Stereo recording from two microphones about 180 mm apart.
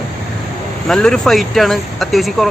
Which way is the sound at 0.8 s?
5° left (ahead or behind).